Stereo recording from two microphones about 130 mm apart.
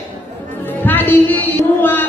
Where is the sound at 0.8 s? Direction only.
15° left (ahead or behind).